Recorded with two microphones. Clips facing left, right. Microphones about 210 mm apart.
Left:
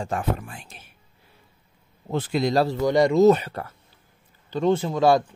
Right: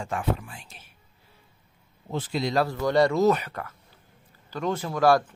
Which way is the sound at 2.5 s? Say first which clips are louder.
Left 2 dB; 25° left (ahead or behind).